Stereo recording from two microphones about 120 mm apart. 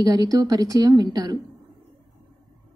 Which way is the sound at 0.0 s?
30° right (ahead or behind).